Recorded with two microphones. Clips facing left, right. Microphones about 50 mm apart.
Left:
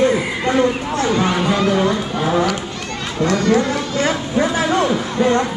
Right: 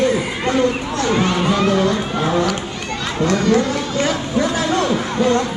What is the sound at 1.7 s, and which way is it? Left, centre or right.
Run, centre.